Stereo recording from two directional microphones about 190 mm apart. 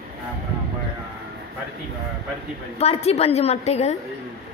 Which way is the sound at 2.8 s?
35° left (ahead or behind).